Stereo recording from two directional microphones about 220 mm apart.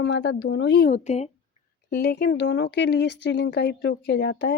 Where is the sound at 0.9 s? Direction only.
30° left (ahead or behind).